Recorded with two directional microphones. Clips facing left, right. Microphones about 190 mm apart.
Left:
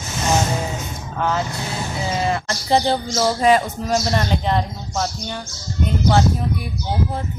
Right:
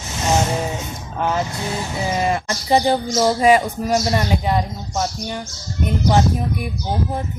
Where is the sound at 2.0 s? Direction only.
15° right (ahead or behind).